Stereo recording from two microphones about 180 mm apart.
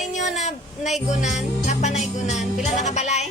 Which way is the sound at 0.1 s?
40° left (ahead or behind).